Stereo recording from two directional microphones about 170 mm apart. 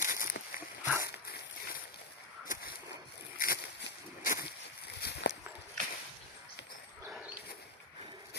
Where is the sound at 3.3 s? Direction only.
55° left (ahead or behind).